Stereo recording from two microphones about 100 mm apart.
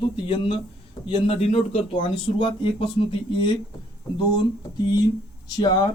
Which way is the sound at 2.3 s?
60° left (ahead or behind).